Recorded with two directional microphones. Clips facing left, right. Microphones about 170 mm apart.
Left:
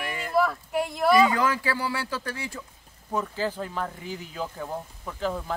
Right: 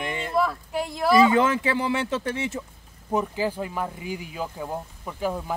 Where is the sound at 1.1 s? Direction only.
25° right (ahead or behind).